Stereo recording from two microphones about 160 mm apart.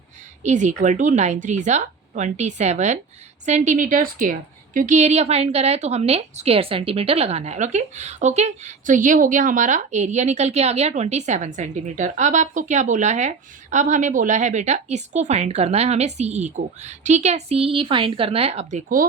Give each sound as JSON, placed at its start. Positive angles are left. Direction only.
{"t": 0.4, "sound": "a woman's voice", "side_deg": -50}